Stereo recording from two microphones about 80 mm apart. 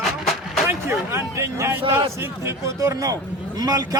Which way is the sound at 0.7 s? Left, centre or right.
Right.